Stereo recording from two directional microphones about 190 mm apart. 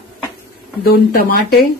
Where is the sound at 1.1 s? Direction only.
55° left (ahead or behind).